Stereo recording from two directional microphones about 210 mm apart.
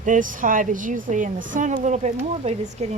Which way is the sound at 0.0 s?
40° right (ahead or behind).